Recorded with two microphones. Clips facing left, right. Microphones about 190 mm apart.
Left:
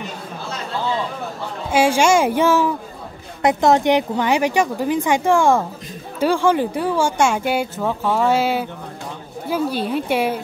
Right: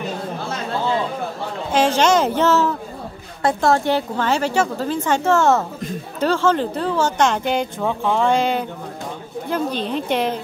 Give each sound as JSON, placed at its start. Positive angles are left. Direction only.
{"t": 1.7, "sound": "speech", "side_deg": 10}